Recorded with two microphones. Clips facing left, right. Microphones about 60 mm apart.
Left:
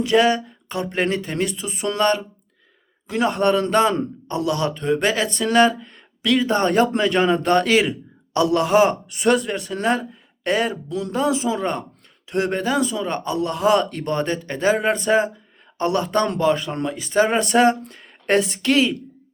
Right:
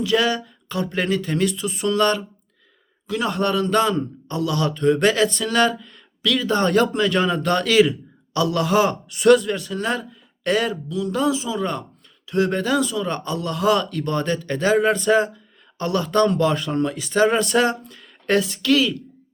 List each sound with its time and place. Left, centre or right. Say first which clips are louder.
0.0 s a man's voice: left 3 dB; left
4.8 s a man's voice: right 7 dB; centre
16.5 s speech: left 1 dB; centre; by 18.9 s left